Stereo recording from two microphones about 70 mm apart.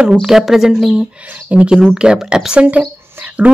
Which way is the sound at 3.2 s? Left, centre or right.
Right.